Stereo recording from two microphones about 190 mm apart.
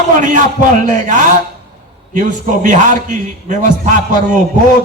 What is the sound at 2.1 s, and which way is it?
A man's voice, 45° right (ahead or behind).